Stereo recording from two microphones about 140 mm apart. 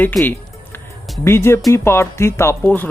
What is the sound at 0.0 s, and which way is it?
Speech, 10° left (ahead or behind).